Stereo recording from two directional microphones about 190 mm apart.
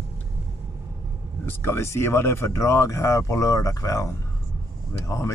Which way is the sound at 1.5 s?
10° left (ahead or behind).